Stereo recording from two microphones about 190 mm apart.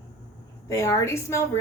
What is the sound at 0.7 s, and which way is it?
Speech, 15° left (ahead or behind).